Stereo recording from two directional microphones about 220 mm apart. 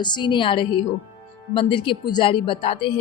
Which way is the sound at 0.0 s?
20° left (ahead or behind).